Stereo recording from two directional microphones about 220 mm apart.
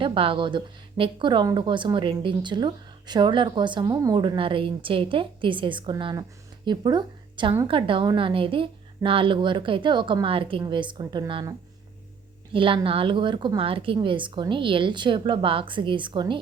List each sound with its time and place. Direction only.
0.0 s speech: 25° right (ahead or behind)
12.5 s speech: 25° right (ahead or behind)